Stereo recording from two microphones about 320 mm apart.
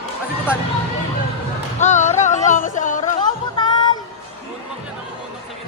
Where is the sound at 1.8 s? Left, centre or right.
Left.